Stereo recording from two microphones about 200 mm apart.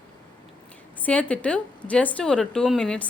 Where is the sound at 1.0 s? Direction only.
5° left (ahead or behind).